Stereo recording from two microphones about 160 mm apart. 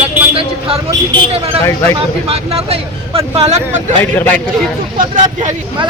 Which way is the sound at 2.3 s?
35° right (ahead or behind).